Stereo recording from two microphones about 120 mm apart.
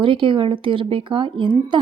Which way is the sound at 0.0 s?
45° right (ahead or behind).